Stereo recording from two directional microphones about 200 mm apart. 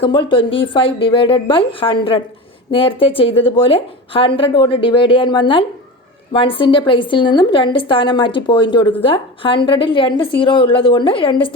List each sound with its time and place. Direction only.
0.0 s a woman's voice: 25° left (ahead or behind)